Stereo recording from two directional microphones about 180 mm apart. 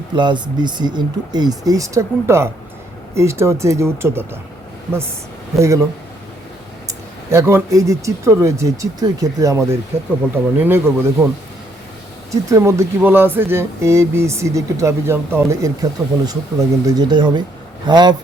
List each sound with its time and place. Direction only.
0.2 s speech: 25° right (ahead or behind)
5.5 s speech: 15° right (ahead or behind)
6.8 s speech: 15° right (ahead or behind)
12.3 s speech: 15° right (ahead or behind)